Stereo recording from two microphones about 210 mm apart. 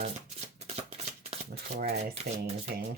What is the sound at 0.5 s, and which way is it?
Shuffling cards, 30° right (ahead or behind).